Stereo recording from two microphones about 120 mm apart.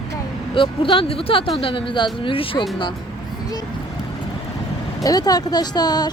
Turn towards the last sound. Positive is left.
turn(degrees=35)  # may be behind; listen again after turning